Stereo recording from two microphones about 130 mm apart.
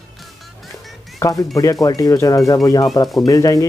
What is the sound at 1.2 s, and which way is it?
Speech, 25° left (ahead or behind).